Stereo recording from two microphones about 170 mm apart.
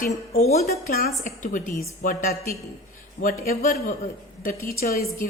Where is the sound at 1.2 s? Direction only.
50° left (ahead or behind).